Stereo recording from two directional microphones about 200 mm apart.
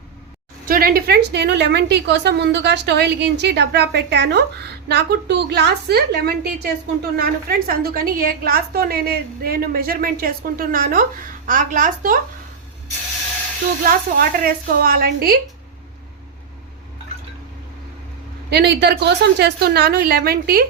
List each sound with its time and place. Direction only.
0.7 s a woman's voice: 45° right (ahead or behind)
13.8 s a woman's voice: 45° right (ahead or behind)
18.5 s a woman's voice: 55° right (ahead or behind)